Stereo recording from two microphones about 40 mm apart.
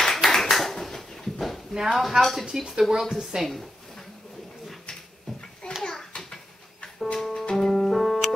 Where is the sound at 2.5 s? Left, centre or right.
Centre.